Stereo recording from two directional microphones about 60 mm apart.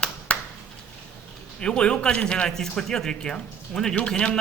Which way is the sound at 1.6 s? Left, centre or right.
Centre.